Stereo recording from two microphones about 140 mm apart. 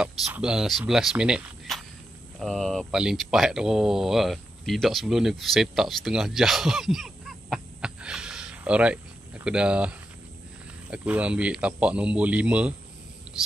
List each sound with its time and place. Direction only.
0.0 s speech: 5° right (ahead or behind)